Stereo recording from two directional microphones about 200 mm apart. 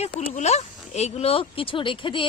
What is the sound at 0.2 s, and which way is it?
Speech, 35° left (ahead or behind).